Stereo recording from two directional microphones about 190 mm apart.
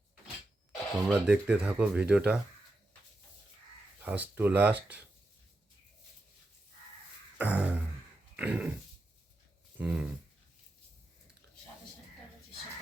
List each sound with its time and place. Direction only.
1.0 s speech: 5° right (ahead or behind)
4.0 s speech: 10° right (ahead or behind)
7.3 s beatboxing: 10° right (ahead or behind)
8.4 s dog: 10° right (ahead or behind)
9.7 s a sound: 5° right (ahead or behind)